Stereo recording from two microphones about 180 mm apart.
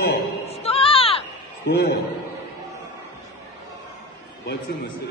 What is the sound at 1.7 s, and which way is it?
Speech, 65° left (ahead or behind).